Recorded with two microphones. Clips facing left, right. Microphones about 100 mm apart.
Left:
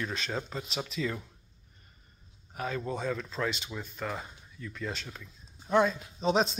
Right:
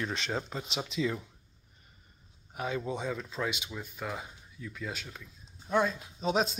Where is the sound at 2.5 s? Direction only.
15° right (ahead or behind).